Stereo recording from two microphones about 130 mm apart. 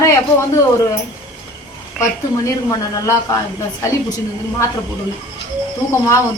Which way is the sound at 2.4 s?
25° left (ahead or behind).